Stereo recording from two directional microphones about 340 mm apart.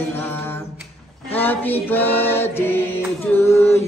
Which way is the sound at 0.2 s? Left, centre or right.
Centre.